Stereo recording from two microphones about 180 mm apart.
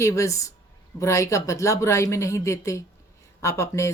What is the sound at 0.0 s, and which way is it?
A woman's voice, 15° left (ahead or behind).